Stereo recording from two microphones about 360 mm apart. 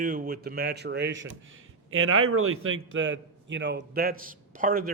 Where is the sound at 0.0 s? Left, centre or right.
Right.